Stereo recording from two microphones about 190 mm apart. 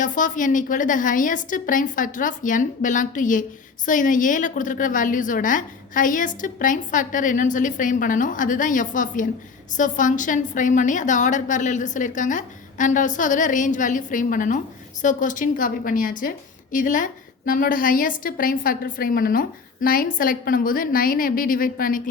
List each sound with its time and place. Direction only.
0.0 s a woman's voice: 40° left (ahead or behind)